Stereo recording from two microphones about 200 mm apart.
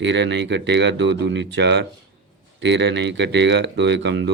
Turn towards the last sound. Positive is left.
turn(degrees=-60)  # may be behind; listen again after turning